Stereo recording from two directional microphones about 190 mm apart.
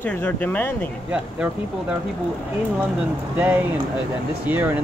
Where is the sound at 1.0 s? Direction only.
5° right (ahead or behind).